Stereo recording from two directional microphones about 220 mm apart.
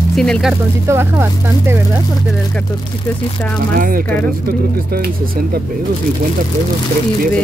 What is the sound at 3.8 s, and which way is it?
Speech, 40° right (ahead or behind).